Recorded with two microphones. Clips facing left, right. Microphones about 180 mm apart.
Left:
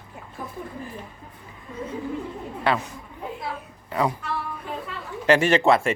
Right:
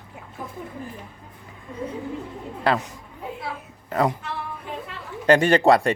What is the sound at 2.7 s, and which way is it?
Speech, 35° right (ahead or behind).